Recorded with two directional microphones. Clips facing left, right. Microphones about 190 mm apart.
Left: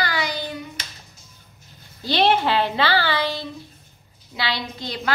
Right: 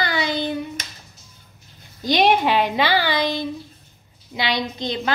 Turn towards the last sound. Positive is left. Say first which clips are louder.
# right 5 dB
turn(degrees=-20)  # may be behind; listen again after turning